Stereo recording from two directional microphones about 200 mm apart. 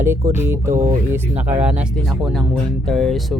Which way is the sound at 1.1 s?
10° right (ahead or behind).